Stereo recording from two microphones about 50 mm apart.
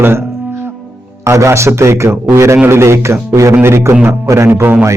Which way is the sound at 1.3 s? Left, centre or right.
Right.